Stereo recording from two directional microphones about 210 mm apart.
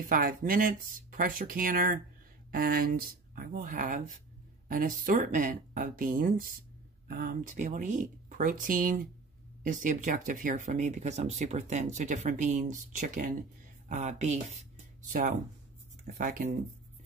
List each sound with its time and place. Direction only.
0.0 s speech: 40° right (ahead or behind)
16.2 s speech: 40° right (ahead or behind)